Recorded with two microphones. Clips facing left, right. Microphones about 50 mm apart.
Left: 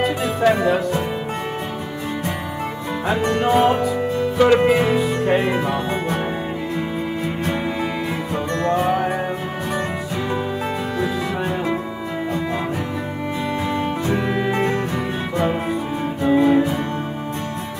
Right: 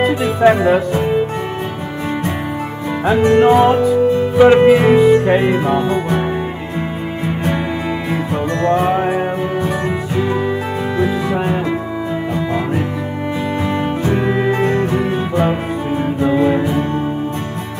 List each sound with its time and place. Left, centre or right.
0.0 s speech: right
3.1 s music: right
8.1 s music: right
10.1 s music: right
13.7 s music: right
16.3 s music: centre